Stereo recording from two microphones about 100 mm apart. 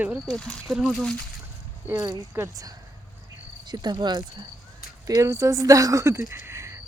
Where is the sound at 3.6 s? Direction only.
45° right (ahead or behind).